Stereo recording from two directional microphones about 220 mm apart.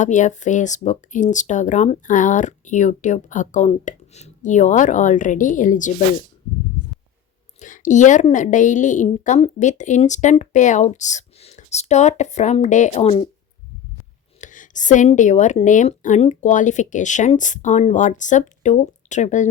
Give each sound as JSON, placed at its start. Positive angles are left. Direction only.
{"t": 0.0, "sound": "speech", "side_deg": 35}
{"t": 7.6, "sound": "speech", "side_deg": 35}
{"t": 14.4, "sound": "speech", "side_deg": 35}